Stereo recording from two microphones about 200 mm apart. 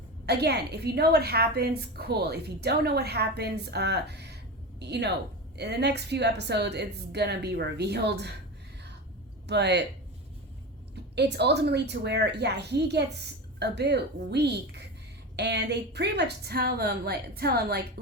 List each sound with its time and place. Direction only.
0.3 s a woman's voice: 55° right (ahead or behind)
9.5 s a woman's voice: 60° right (ahead or behind)
10.9 s a woman's voice: 55° right (ahead or behind)